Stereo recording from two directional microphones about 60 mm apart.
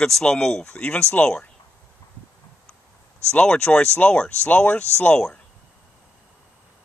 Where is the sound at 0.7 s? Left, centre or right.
Left.